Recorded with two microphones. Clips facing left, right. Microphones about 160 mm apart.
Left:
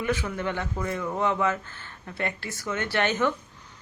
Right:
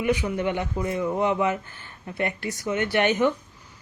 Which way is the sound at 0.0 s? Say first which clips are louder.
Right 4 dB; 15° right (ahead or behind).